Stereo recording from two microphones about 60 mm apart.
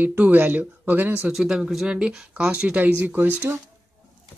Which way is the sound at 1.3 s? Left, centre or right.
Centre.